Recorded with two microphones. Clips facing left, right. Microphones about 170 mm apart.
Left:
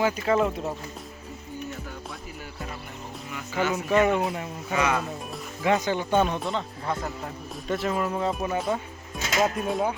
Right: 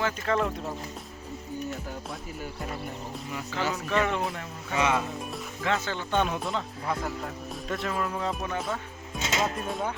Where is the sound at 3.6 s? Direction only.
35° right (ahead or behind).